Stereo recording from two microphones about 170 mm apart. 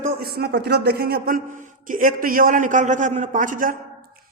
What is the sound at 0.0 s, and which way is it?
A man's voice, 65° right (ahead or behind).